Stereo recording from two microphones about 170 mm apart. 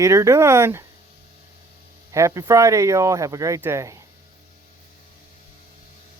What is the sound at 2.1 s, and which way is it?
Speech, 20° right (ahead or behind).